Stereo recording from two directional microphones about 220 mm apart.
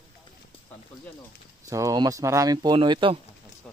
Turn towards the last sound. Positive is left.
turn(degrees=-20)  # may be behind; listen again after turning